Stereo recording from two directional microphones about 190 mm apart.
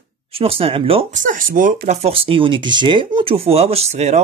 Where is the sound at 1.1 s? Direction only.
45° right (ahead or behind).